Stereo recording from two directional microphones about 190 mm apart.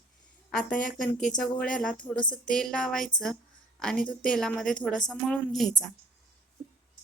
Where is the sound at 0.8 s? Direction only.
45° left (ahead or behind).